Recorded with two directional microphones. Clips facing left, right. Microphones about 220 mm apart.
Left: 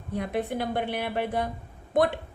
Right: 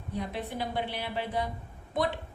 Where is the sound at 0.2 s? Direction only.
55° left (ahead or behind).